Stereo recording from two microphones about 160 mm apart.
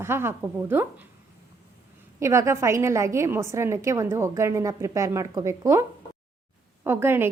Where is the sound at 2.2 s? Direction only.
20° right (ahead or behind).